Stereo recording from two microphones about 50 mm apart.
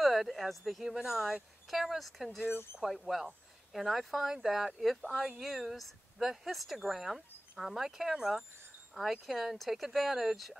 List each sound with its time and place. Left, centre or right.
0.0 s speech: centre
2.5 s speech: left
2.8 s speech: centre